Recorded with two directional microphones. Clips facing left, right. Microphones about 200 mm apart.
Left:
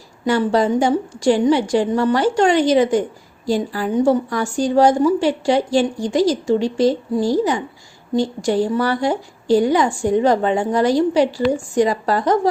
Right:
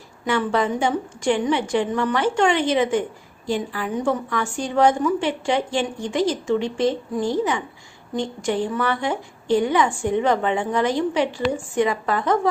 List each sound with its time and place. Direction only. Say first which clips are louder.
0.3 s a woman's voice: left 5 dB; 35° left (ahead or behind)